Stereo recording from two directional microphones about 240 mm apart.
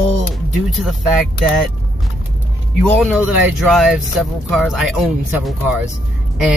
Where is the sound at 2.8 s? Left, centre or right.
Centre.